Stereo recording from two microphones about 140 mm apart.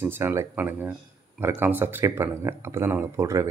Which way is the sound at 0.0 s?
15° right (ahead or behind).